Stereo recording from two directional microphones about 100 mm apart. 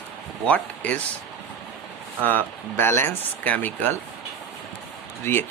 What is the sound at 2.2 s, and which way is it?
Speech, 20° left (ahead or behind).